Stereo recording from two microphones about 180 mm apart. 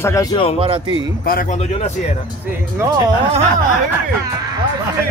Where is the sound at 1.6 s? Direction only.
40° left (ahead or behind).